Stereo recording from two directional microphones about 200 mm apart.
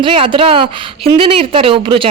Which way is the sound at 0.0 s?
25° right (ahead or behind).